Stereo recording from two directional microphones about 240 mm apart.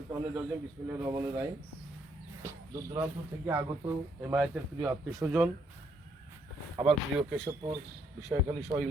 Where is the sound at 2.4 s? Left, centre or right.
Centre.